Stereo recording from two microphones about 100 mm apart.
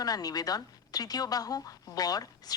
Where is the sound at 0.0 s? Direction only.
40° left (ahead or behind).